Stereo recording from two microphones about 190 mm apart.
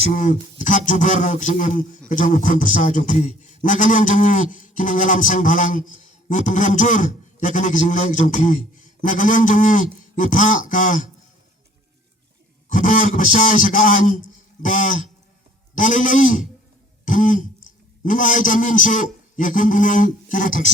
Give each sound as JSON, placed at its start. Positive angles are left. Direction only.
{"t": 0.1, "sound": "a man's voice", "side_deg": 40}
{"t": 12.7, "sound": "a man's voice", "side_deg": 45}